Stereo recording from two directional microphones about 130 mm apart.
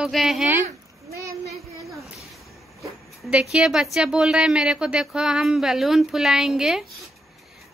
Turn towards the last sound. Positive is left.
turn(degrees=-5)  # may be behind; listen again after turning